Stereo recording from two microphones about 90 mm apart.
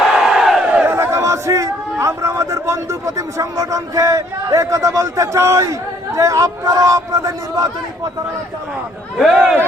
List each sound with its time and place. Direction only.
0.0 s crowd: 5° right (ahead or behind)
0.9 s a sound: 30° right (ahead or behind)
3.2 s a man's voice: 35° right (ahead or behind)
9.1 s speech: 5° right (ahead or behind)